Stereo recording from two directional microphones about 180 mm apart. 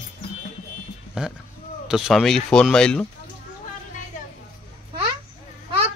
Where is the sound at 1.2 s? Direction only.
5° right (ahead or behind).